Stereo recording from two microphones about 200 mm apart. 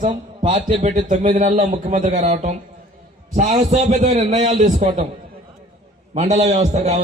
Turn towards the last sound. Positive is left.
turn(degrees=-35)  # may be behind; listen again after turning